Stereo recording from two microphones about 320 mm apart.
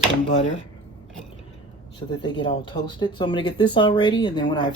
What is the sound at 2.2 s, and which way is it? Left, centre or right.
Speech, centre.